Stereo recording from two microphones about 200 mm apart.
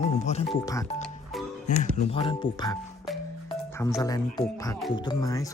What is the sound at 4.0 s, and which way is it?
Speech, 20° left (ahead or behind).